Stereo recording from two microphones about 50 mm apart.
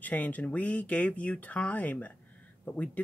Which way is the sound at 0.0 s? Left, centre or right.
Left.